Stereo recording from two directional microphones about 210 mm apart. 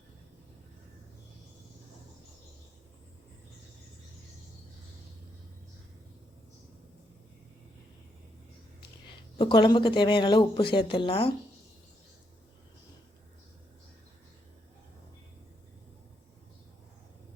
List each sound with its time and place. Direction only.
9.4 s speech: 20° left (ahead or behind)